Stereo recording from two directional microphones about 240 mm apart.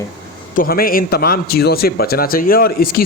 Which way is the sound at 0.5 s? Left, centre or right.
Left.